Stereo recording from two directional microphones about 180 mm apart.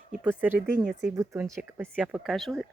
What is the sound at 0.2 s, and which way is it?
Speech, 10° right (ahead or behind).